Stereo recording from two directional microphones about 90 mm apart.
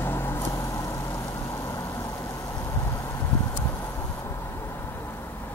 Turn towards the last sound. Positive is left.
turn(degrees=30)  # may be behind; listen again after turning